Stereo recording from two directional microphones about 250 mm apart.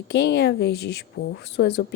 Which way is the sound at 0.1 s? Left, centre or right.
Left.